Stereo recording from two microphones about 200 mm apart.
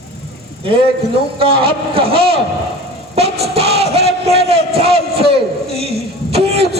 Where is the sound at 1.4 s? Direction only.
25° right (ahead or behind).